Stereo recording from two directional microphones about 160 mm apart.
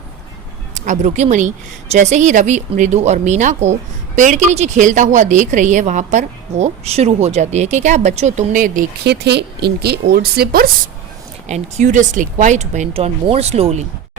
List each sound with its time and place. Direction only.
0.9 s speech: 45° right (ahead or behind)
9.0 s speech: 90° right; by 10.7 s 75° right (ahead or behind)
11.4 s speech: 45° right (ahead or behind)